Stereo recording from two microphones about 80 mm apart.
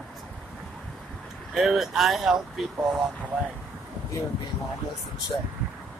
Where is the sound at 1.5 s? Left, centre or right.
Centre.